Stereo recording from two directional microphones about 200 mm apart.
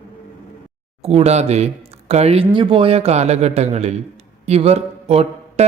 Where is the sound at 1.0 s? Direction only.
30° right (ahead or behind).